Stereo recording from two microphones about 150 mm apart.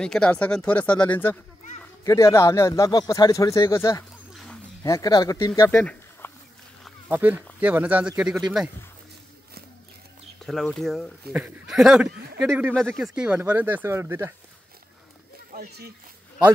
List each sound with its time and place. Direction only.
0.0 s speech: 5° left (ahead or behind)
4.3 s wild animals: centre (ahead or behind)
4.8 s speech: 20° left (ahead or behind)
5.6 s a sound: 10° left (ahead or behind)
7.1 s speech: 10° right (ahead or behind)
10.4 s speech: centre (ahead or behind)
11.3 s speech: 10° right (ahead or behind)
15.5 s speech: 80° right